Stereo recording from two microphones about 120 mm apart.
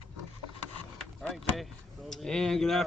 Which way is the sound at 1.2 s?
Centre (ahead or behind).